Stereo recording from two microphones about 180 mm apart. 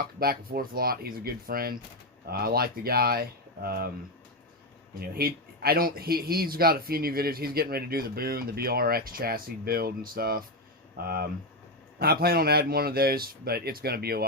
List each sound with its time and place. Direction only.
0.0 s speech: 55° right (ahead or behind)
4.9 s speech: 55° right (ahead or behind)